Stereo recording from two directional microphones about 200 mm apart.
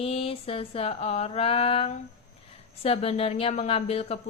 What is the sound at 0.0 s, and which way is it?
A woman's voice, 30° left (ahead or behind).